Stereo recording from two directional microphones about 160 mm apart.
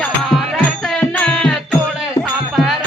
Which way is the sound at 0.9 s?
5° left (ahead or behind).